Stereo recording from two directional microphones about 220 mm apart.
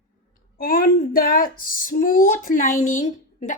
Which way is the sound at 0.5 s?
40° left (ahead or behind).